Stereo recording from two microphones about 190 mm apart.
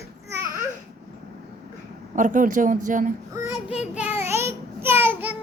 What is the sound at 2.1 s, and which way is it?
Speech, 45° right (ahead or behind).